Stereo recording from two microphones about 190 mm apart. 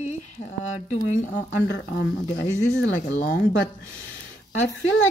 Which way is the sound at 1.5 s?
65° left (ahead or behind).